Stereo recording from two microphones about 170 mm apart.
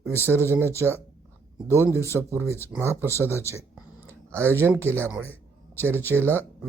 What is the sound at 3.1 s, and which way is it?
Speech, 15° left (ahead or behind).